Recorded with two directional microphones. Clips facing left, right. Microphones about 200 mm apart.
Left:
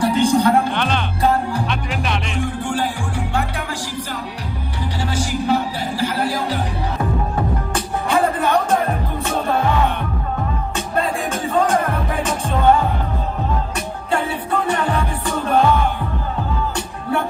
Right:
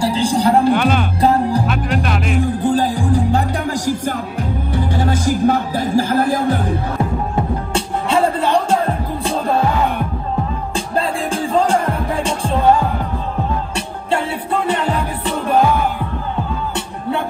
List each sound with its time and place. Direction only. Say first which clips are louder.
0.0 s a man's voice: left 1 dB; 30° right (ahead or behind)
0.7 s speech: right 5 dB; 5° right (ahead or behind)
1.2 s music: right 4 dB; 35° right (ahead or behind)
1.7 s speech: right 4 dB; centre (ahead or behind)
2.4 s music: right 6 dB; 35° right (ahead or behind)
4.7 s music: right 5 dB; 50° right (ahead or behind)
7.7 s music: right 3 dB; 25° right (ahead or behind)
11.0 s music: right 2 dB; 30° right (ahead or behind)